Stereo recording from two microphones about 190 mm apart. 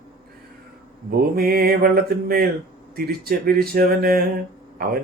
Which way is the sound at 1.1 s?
55° right (ahead or behind).